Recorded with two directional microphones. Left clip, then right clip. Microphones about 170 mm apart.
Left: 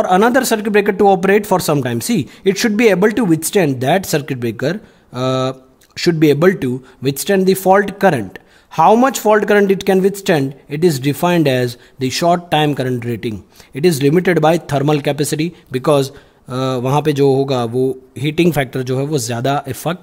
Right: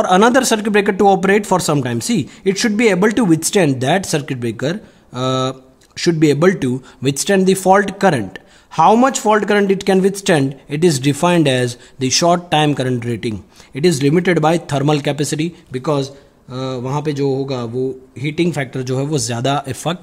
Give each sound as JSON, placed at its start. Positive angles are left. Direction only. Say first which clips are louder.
{"t": 0.0, "sound": "speech", "louder": "even", "side_deg": 10}
{"t": 15.7, "sound": "a man's voice", "louder": "left 6 dB", "side_deg": 35}